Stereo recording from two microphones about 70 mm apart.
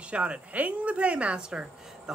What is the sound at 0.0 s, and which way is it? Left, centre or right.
Speech, centre.